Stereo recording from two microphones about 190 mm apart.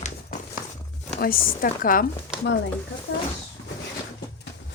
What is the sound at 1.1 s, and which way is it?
Speech, 50° left (ahead or behind).